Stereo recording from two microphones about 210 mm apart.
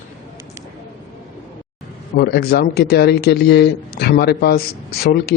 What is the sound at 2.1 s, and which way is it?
Speech, 50° left (ahead or behind).